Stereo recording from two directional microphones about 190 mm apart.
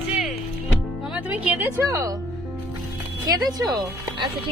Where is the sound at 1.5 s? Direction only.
15° right (ahead or behind).